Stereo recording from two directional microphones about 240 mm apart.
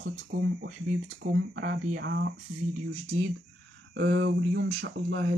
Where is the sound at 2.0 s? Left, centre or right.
Right.